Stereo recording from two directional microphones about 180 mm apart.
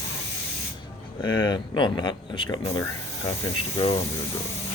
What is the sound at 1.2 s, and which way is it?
Speech, 25° left (ahead or behind).